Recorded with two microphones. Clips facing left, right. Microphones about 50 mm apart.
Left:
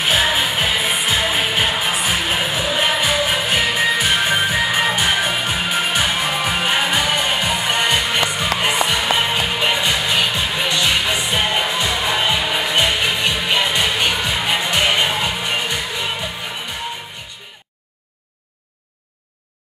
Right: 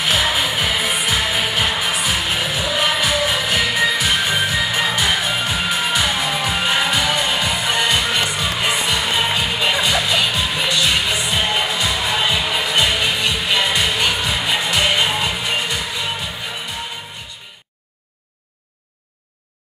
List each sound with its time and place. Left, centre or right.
0.0 s music: left